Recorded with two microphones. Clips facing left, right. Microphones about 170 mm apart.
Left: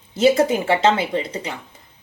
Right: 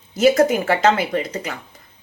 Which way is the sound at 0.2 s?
25° left (ahead or behind).